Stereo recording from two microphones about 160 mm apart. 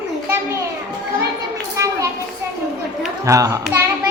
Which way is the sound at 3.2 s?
20° right (ahead or behind).